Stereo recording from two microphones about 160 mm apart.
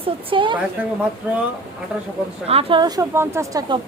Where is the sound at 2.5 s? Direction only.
35° right (ahead or behind).